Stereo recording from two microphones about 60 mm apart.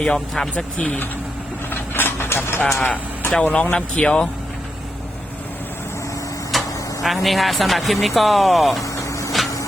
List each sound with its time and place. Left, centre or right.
0.0 s speech: centre
1.7 s a sound: left
2.8 s speech: left
6.5 s speech: centre
8.8 s vehicle: left